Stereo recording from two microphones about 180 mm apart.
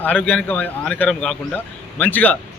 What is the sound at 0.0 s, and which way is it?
A man's voice, 10° left (ahead or behind).